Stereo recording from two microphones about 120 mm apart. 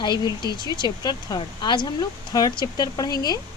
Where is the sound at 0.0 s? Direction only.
40° left (ahead or behind).